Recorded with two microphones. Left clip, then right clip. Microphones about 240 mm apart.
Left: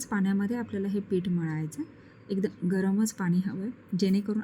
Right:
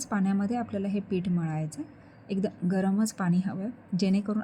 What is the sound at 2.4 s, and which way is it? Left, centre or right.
Speech, right.